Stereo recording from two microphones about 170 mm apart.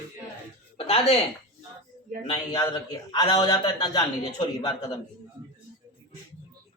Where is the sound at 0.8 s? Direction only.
35° left (ahead or behind).